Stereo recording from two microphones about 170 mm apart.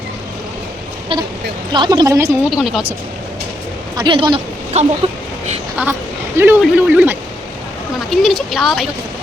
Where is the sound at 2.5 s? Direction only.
5° right (ahead or behind).